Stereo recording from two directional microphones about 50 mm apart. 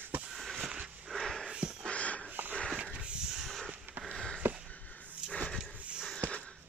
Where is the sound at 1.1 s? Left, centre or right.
Centre.